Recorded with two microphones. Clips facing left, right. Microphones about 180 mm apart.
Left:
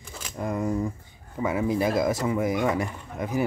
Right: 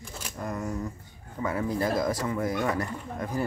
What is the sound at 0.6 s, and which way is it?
Speech, 30° left (ahead or behind).